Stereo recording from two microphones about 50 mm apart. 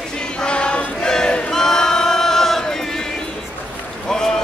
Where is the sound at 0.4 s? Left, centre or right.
Centre.